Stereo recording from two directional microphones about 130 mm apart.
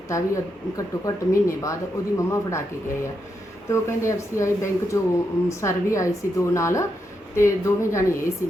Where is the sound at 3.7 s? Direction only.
20° left (ahead or behind).